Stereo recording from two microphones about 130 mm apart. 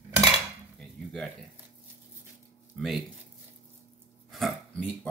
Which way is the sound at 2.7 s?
Centre (ahead or behind).